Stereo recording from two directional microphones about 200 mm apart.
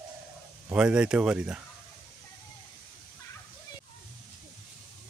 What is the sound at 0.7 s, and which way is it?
Speech, 5° right (ahead or behind).